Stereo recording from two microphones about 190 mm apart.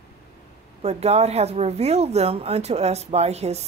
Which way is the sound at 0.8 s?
35° right (ahead or behind).